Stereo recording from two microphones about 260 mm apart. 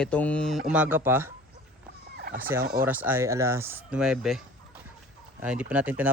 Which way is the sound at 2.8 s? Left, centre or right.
Centre.